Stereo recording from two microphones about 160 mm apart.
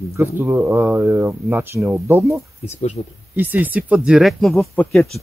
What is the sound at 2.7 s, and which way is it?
Speech, 45° left (ahead or behind).